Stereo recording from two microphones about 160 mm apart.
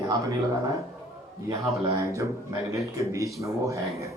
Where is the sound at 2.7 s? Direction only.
20° right (ahead or behind).